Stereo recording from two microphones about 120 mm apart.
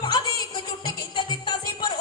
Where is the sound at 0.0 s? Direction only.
40° left (ahead or behind).